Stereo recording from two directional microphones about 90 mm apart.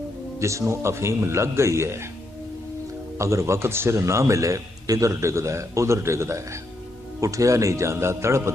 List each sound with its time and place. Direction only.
0.3 s a man's voice: 35° right (ahead or behind)
3.2 s a man's voice: 35° right (ahead or behind)